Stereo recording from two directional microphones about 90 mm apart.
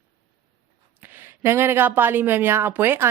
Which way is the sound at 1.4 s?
25° right (ahead or behind).